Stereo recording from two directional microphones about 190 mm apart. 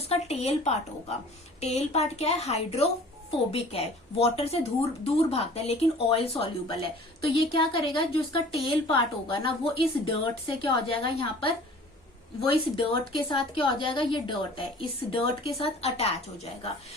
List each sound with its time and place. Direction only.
0.1 s a woman's voice: 35° left (ahead or behind)